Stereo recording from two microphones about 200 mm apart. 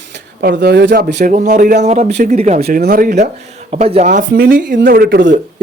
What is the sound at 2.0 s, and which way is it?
Speech, 55° right (ahead or behind).